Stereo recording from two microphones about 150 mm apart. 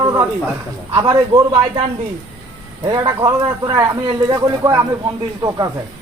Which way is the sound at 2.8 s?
25° right (ahead or behind).